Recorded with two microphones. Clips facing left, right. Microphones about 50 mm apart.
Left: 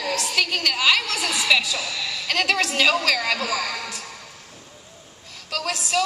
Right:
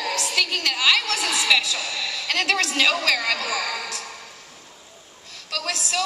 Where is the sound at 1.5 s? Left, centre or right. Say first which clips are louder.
Left 2 dB; centre.